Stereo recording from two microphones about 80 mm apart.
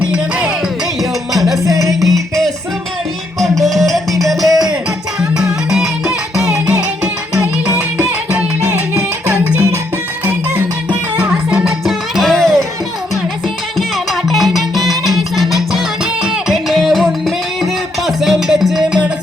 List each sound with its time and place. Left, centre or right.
0.1 s music: centre
1.6 s music: right
2.0 s music: centre
3.5 s music: centre
5.7 s music: centre
7.0 s music: centre
13.7 s music: centre